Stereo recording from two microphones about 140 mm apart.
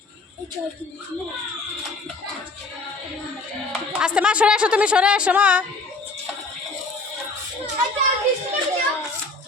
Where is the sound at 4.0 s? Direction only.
5° right (ahead or behind).